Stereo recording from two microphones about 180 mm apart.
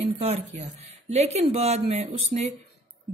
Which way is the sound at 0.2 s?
35° right (ahead or behind).